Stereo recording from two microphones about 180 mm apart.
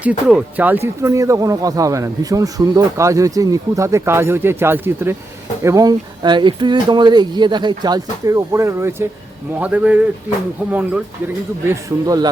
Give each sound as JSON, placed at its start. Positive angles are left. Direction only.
{"t": 0.0, "sound": "speech", "side_deg": -5}